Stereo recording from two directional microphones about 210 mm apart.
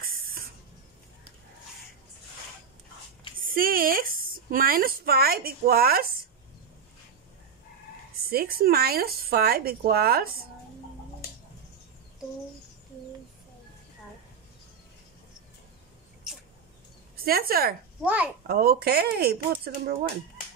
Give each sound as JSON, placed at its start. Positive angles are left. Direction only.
{"t": 0.0, "sound": "spray", "side_deg": -40}
{"t": 3.4, "sound": "speech", "side_deg": -45}
{"t": 8.3, "sound": "speech", "side_deg": -45}
{"t": 17.2, "sound": "speech", "side_deg": -45}
{"t": 18.0, "sound": "a child's voice", "side_deg": -5}
{"t": 18.5, "sound": "speech", "side_deg": -45}